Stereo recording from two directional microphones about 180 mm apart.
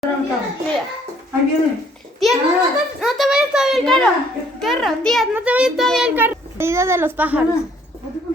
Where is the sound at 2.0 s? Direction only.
Centre (ahead or behind).